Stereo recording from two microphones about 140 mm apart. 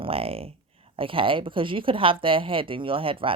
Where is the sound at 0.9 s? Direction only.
40° right (ahead or behind).